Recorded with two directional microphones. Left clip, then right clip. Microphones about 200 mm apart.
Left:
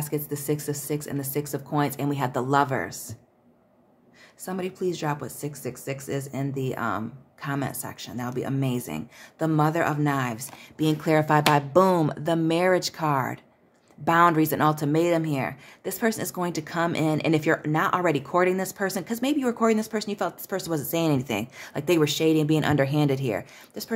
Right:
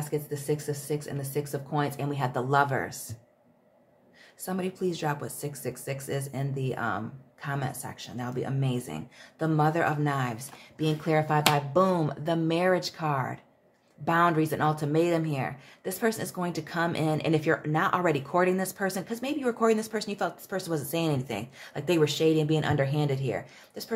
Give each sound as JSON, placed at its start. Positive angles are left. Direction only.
{"t": 0.0, "sound": "speech", "side_deg": 25}
{"t": 4.5, "sound": "speech", "side_deg": 20}